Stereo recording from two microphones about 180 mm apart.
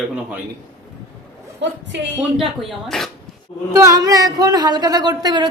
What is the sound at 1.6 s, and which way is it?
Speech, 75° right (ahead or behind).